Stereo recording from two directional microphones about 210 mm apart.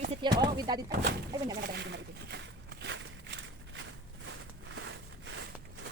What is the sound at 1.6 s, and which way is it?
Walk, 50° right (ahead or behind).